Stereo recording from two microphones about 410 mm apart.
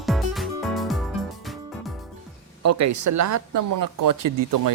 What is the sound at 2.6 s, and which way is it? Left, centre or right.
Speech, right.